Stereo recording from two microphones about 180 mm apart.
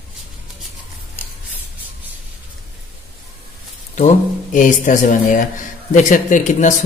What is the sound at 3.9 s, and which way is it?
A man's voice, 45° left (ahead or behind).